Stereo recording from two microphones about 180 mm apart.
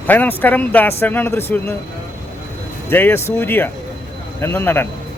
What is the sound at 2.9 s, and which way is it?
Speech, 10° left (ahead or behind).